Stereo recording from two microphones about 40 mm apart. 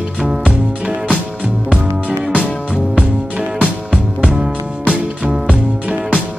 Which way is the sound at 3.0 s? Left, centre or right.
Right.